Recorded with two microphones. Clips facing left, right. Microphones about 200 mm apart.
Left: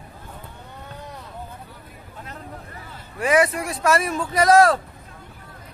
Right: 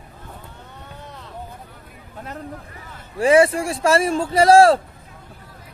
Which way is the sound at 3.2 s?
30° right (ahead or behind).